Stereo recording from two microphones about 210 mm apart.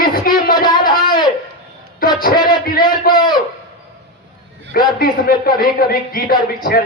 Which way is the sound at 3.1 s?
20° left (ahead or behind).